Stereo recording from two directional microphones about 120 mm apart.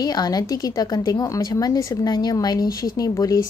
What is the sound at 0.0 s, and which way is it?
A woman's voice, 35° left (ahead or behind).